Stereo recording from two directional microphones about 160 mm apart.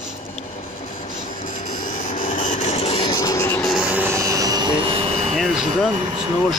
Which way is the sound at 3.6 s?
5° right (ahead or behind).